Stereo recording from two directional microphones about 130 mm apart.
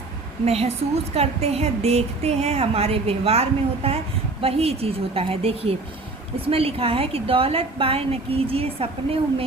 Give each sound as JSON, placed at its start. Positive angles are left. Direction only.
{"t": 0.4, "sound": "a woman's voice", "side_deg": -55}